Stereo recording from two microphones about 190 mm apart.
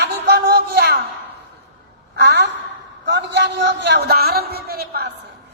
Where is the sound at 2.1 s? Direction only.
60° right (ahead or behind).